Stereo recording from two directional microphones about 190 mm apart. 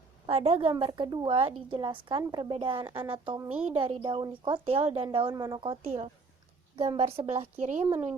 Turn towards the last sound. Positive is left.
turn(degrees=-40)  # may be behind; listen again after turning